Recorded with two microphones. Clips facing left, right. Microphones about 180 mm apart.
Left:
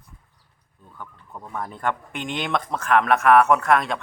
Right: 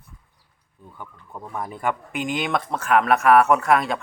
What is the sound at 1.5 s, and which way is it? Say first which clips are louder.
Speech: right 1 dB; 10° right (ahead or behind).